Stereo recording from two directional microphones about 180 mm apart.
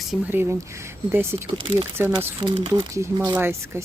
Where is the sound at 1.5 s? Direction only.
25° right (ahead or behind).